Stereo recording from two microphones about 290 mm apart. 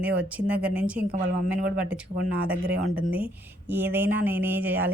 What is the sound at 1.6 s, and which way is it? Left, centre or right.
Speech, right.